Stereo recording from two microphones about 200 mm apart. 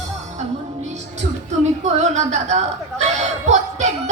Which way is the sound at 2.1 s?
35° right (ahead or behind).